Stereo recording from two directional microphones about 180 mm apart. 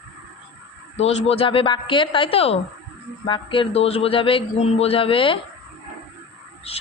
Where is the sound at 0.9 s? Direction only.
35° left (ahead or behind).